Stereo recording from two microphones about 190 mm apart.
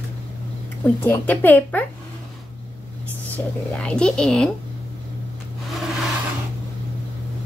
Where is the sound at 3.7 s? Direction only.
5° left (ahead or behind).